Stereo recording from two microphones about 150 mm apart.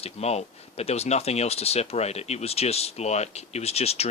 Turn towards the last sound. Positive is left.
turn(degrees=45)  # may be behind; listen again after turning